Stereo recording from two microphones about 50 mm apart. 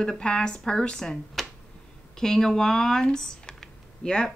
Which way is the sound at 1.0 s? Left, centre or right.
Centre.